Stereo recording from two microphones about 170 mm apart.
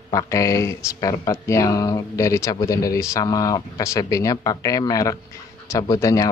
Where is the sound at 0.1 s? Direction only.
20° left (ahead or behind).